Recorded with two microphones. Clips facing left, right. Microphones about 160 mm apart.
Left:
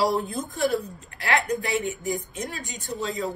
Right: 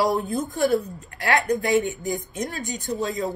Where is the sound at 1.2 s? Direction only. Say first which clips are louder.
Right 3 dB; 40° right (ahead or behind).